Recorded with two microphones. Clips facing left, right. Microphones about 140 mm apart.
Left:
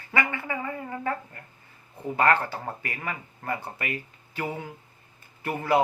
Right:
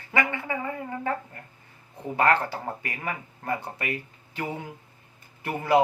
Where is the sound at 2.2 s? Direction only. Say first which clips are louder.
Even; 20° right (ahead or behind).